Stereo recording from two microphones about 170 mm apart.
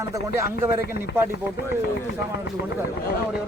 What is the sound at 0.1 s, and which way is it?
Speech, 15° right (ahead or behind).